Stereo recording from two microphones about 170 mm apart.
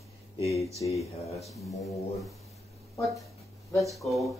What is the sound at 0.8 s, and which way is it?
Speech, 25° left (ahead or behind).